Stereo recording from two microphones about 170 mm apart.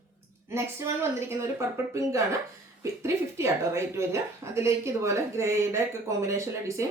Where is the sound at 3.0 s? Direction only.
15° right (ahead or behind).